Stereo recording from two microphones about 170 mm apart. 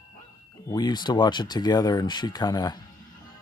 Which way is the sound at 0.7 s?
25° left (ahead or behind).